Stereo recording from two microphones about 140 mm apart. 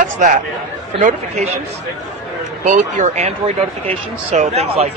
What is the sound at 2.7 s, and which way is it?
A man's voice, 60° right (ahead or behind).